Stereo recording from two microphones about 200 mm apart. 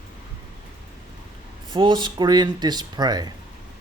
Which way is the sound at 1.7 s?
25° right (ahead or behind).